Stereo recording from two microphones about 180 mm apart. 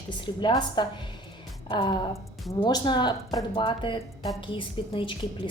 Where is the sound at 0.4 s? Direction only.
25° left (ahead or behind).